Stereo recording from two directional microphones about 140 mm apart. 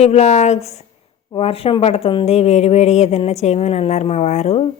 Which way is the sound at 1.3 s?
40° left (ahead or behind).